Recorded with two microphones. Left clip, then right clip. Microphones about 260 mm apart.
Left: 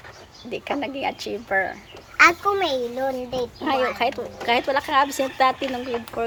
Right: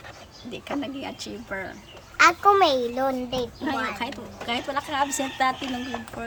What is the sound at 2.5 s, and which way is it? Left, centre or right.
A woman's voice, centre.